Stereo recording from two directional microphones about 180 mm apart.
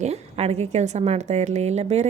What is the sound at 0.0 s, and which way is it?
A woman's voice, 35° right (ahead or behind).